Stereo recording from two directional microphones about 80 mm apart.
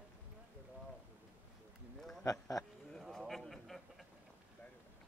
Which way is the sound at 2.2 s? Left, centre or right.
Left.